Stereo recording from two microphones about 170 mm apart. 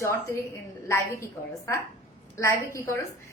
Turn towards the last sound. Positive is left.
turn(degrees=15)  # may be behind; listen again after turning